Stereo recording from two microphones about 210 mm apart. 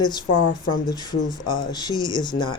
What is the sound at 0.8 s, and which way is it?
Speech, 20° left (ahead or behind).